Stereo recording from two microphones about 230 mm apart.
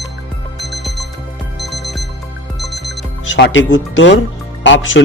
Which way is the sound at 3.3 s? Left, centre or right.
Left.